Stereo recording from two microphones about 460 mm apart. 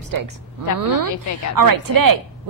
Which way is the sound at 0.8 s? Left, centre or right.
Right.